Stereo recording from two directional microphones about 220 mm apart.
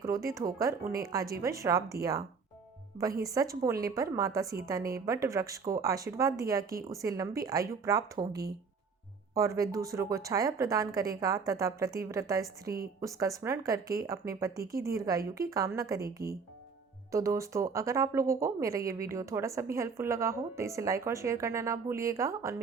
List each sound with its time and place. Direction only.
0.0 s speech: 15° right (ahead or behind)
3.0 s speech: 15° right (ahead or behind)
4.8 s a woman's voice: 40° right (ahead or behind)
5.0 s speech: 15° right (ahead or behind)